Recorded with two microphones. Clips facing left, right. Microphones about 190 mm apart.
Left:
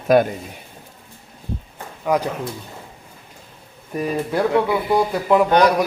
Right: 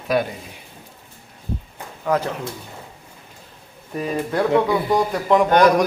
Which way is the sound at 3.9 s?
10° left (ahead or behind).